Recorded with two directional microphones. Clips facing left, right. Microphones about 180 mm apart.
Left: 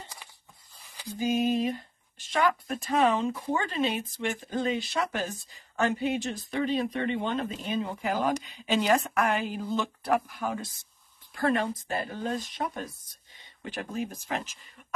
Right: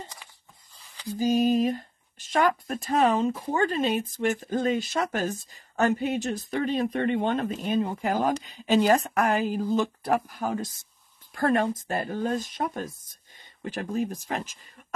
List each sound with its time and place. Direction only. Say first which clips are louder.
1.1 s speech: right 4 dB; 40° right (ahead or behind)